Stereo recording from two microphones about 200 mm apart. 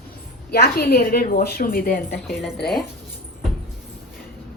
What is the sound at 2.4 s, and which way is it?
Speech, centre (ahead or behind).